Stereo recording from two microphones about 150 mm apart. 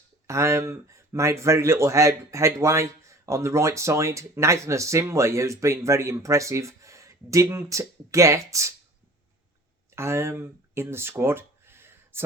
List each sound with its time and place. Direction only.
0.3 s speech: 20° right (ahead or behind)
9.9 s speech: 15° right (ahead or behind)